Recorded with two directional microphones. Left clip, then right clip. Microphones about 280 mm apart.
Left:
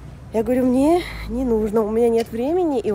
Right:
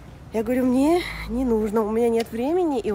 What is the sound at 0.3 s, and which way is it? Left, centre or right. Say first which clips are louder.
Speech: left 4 dB; centre.